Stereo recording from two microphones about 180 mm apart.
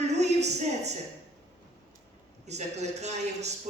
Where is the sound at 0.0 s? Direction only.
40° right (ahead or behind).